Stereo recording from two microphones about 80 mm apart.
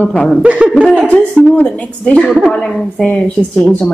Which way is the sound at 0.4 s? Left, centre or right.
Centre.